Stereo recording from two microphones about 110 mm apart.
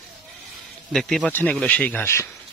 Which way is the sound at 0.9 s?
5° left (ahead or behind).